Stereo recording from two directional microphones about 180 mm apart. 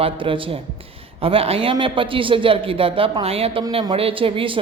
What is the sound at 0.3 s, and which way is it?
Speech, 30° right (ahead or behind).